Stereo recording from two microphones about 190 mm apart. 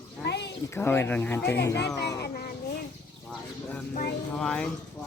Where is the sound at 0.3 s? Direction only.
65° left (ahead or behind).